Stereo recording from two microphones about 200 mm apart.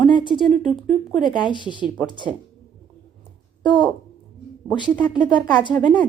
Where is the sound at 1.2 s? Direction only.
25° left (ahead or behind).